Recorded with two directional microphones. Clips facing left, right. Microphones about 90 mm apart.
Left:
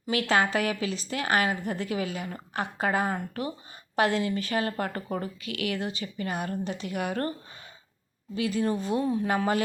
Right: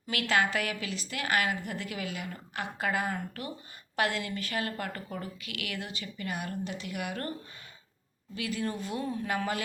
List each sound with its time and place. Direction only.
0.1 s a woman's voice: 30° left (ahead or behind)
8.4 s a woman's voice: 25° left (ahead or behind)